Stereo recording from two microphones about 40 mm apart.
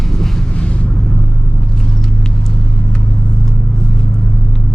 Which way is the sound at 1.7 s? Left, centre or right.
Centre.